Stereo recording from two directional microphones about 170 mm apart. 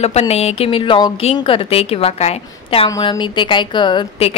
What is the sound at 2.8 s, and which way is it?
A woman's voice, 25° left (ahead or behind).